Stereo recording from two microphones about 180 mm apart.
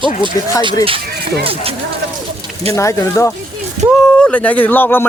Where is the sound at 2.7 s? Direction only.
15° left (ahead or behind).